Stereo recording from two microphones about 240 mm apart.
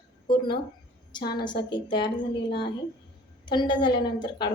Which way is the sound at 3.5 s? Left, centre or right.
Centre.